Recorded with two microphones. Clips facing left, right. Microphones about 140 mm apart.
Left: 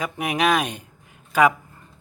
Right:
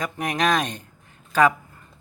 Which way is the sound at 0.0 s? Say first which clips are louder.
Left 1 dB; 10° left (ahead or behind).